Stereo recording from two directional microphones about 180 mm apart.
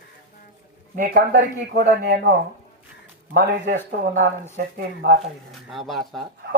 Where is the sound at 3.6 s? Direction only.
45° right (ahead or behind).